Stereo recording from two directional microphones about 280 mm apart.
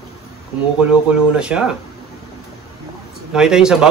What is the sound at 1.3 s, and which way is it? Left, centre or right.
Speech, centre.